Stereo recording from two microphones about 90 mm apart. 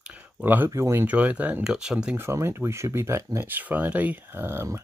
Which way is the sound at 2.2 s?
30° right (ahead or behind).